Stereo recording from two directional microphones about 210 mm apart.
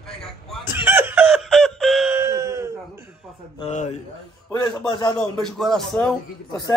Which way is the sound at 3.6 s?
35° left (ahead or behind).